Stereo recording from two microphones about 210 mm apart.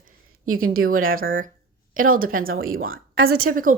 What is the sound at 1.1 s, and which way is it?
Speech, 40° right (ahead or behind).